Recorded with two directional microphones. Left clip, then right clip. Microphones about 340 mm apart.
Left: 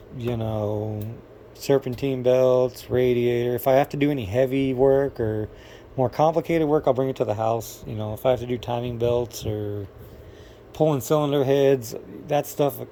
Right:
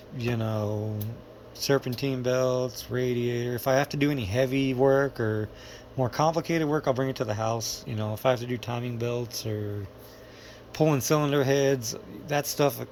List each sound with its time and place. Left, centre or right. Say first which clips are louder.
0.4 s speech: left 4 dB; centre
7.9 s speech: left 6 dB; centre
8.2 s speech: left 4 dB; centre
10.8 s speech: left 3 dB; centre